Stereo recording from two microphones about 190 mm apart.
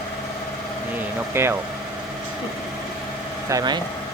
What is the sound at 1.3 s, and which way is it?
Speech, 15° right (ahead or behind).